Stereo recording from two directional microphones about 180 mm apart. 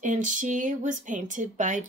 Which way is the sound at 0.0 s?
45° right (ahead or behind).